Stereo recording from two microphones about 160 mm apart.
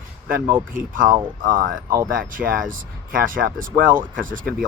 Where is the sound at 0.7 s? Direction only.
60° right (ahead or behind).